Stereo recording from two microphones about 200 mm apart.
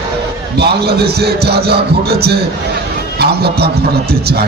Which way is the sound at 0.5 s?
55° right (ahead or behind).